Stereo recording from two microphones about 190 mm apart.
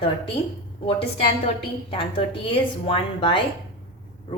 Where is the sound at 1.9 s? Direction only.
25° left (ahead or behind).